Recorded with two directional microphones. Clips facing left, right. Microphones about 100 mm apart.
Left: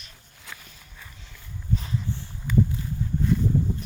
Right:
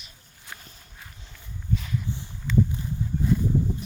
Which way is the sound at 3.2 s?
15° right (ahead or behind).